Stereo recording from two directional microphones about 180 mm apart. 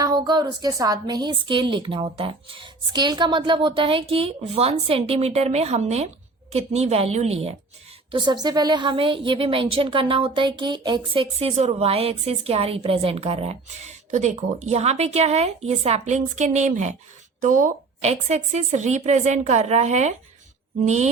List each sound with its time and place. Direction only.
0.0 s a woman's voice: 25° right (ahead or behind)
8.1 s a woman's voice: 25° right (ahead or behind); by 21.1 s 40° right (ahead or behind)